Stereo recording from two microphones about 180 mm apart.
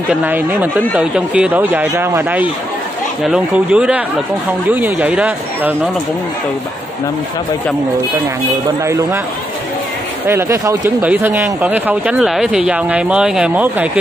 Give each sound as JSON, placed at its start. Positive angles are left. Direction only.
{"t": 0.1, "sound": "speech", "side_deg": -10}
{"t": 8.8, "sound": "speech", "side_deg": -15}
{"t": 10.2, "sound": "speech", "side_deg": -15}